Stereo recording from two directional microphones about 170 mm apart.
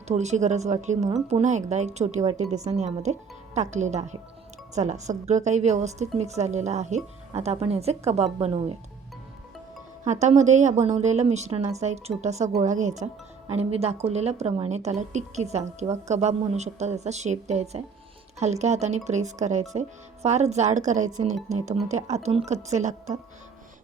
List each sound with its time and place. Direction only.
0.1 s a woman's voice: 40° right (ahead or behind)
10.0 s a woman's voice: 45° right (ahead or behind)